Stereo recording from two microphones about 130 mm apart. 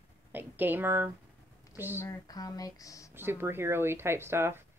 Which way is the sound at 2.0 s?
25° left (ahead or behind).